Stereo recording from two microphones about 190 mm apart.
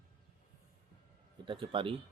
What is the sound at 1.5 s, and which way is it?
Speech, 25° right (ahead or behind).